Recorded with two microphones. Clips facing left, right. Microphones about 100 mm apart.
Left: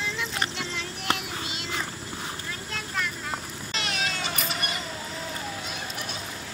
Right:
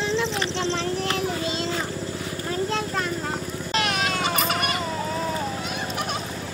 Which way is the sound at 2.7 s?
35° right (ahead or behind).